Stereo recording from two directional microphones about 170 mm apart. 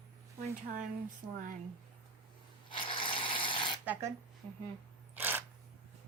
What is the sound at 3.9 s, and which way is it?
Speech, 15° right (ahead or behind).